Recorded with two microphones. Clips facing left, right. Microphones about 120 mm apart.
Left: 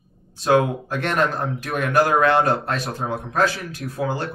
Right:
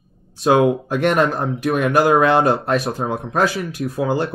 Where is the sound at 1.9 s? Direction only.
Centre (ahead or behind).